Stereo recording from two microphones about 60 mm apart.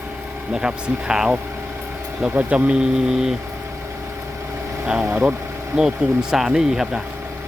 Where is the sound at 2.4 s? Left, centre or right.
Right.